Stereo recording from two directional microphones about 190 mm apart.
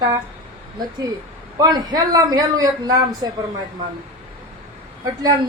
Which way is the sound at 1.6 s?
20° right (ahead or behind).